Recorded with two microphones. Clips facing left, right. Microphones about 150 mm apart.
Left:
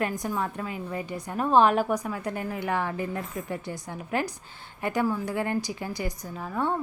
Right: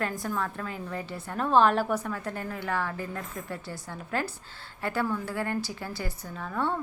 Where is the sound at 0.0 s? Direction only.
15° left (ahead or behind).